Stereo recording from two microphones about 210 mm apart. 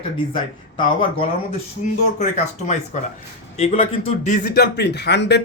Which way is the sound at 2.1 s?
35° left (ahead or behind).